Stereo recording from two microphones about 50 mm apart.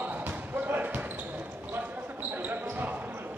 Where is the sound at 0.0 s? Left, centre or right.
Right.